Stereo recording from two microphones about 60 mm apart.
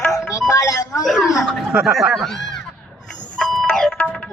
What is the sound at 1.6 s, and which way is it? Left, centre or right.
Speech, centre.